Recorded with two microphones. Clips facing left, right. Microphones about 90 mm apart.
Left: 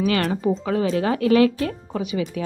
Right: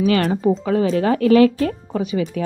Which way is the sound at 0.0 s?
35° right (ahead or behind).